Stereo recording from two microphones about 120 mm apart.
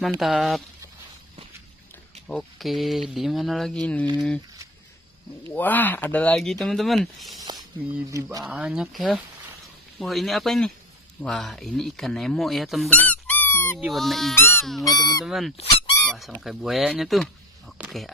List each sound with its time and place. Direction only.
0.0 s speech: centre (ahead or behind)
2.2 s speech: 5° left (ahead or behind)
5.5 s speech: 15° left (ahead or behind)
6.4 s speech: centre (ahead or behind)
8.1 s speech: 25° right (ahead or behind)
8.5 s speech: 10° right (ahead or behind)
12.9 s dog: 10° left (ahead or behind)
13.7 s speech: centre (ahead or behind)
14.9 s speech: 35° left (ahead or behind)
15.2 s speech: centre (ahead or behind)